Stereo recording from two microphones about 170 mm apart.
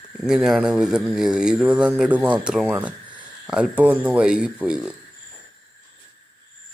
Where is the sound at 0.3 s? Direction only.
5° right (ahead or behind).